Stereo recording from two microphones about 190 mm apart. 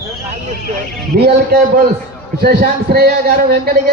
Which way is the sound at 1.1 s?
60° right (ahead or behind).